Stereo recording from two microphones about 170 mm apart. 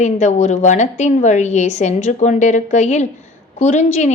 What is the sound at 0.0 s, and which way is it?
A woman's voice, 45° left (ahead or behind).